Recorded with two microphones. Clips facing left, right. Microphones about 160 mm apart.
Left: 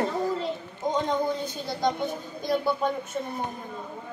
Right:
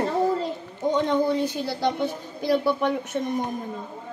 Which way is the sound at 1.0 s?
80° right.